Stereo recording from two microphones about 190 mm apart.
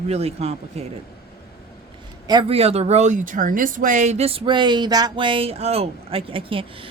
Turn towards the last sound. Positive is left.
turn(degrees=-30)  # may be behind; listen again after turning